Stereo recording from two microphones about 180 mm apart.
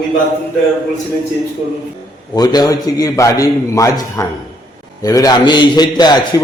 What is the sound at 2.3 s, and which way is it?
A man's voice, 20° left (ahead or behind).